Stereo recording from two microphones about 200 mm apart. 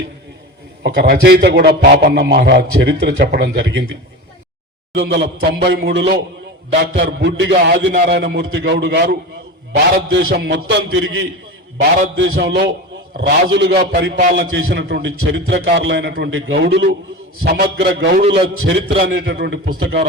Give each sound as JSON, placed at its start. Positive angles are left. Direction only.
{"t": 0.8, "sound": "a man's voice", "side_deg": -55}
{"t": 4.9, "sound": "a man's voice", "side_deg": -60}
{"t": 19.1, "sound": "a man's voice", "side_deg": -60}